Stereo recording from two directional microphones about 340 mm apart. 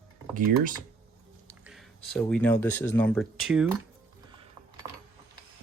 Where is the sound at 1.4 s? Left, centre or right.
Centre.